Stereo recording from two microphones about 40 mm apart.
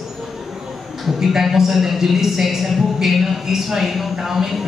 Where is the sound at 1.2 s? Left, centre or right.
Centre.